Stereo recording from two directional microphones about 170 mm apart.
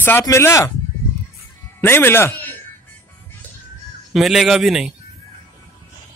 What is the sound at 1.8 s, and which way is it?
Speech, 15° left (ahead or behind).